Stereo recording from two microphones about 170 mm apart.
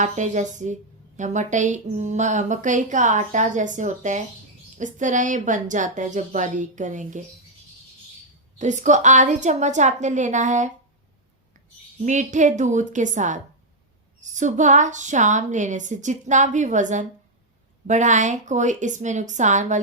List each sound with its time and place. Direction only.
0.0 s a woman's voice: 45° right (ahead or behind)
8.5 s a woman's voice: 45° right (ahead or behind)
12.0 s a woman's voice: 45° right (ahead or behind)